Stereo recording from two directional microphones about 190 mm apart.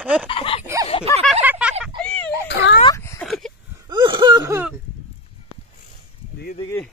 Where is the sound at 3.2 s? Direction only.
Centre (ahead or behind).